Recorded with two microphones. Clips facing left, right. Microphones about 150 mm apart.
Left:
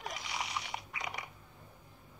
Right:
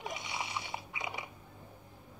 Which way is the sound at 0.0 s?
25° right (ahead or behind).